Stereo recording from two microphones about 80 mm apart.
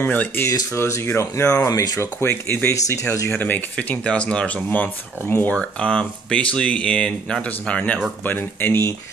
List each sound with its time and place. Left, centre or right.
0.0 s speech: left
0.5 s speech: left
1.5 s speech: left
3.3 s speech: left
5.3 s speech: left
5.6 s speech: centre; by 8.9 s left